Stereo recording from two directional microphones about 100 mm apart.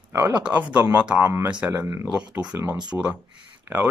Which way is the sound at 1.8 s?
25° right (ahead or behind).